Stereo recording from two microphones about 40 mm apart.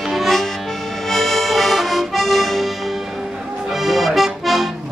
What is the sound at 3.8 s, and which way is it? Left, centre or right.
Accordion, centre.